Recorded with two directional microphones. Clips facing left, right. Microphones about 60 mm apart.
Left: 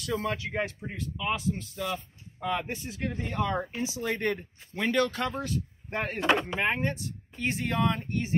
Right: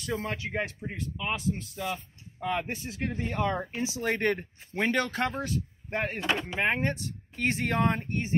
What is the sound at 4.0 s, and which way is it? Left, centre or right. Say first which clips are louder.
Speech: right 3 dB; right.